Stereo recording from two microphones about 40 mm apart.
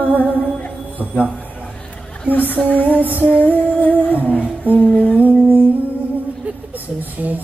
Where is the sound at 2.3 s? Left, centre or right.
Left.